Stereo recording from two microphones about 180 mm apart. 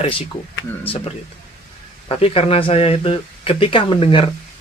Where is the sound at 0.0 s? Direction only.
30° left (ahead or behind).